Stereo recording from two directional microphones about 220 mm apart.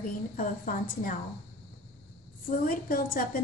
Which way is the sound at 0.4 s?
40° left (ahead or behind).